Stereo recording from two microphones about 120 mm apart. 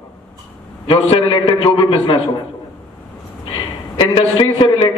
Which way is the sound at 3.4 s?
45° left (ahead or behind).